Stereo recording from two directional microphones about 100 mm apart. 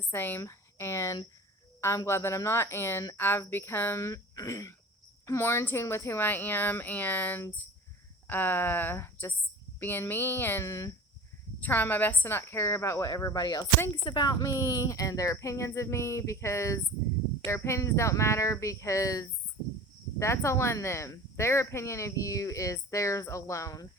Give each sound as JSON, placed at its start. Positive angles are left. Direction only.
{"t": 0.0, "sound": "speech", "side_deg": 20}
{"t": 11.6, "sound": "speech", "side_deg": 20}
{"t": 14.4, "sound": "a sound", "side_deg": 35}
{"t": 20.1, "sound": "speech", "side_deg": 30}